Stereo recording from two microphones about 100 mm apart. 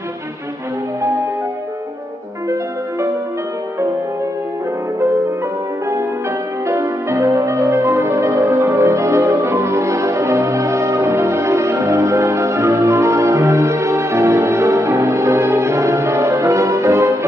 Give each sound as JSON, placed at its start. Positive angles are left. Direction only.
{"t": 6.7, "sound": "music", "side_deg": -30}